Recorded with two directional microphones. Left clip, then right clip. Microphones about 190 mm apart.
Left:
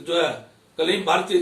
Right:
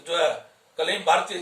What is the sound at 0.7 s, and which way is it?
Speech, 15° right (ahead or behind).